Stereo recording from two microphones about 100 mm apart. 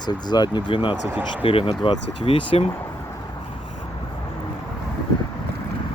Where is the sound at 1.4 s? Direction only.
65° left (ahead or behind).